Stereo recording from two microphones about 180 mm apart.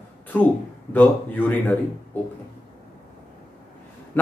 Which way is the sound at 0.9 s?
10° left (ahead or behind).